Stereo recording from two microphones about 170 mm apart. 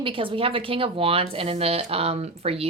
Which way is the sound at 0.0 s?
30° right (ahead or behind).